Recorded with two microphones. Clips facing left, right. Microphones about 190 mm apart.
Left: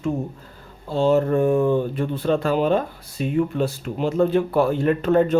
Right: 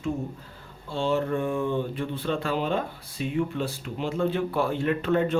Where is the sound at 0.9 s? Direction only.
40° left (ahead or behind).